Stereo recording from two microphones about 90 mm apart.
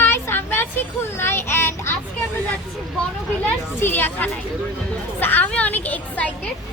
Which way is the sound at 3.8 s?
25° left (ahead or behind).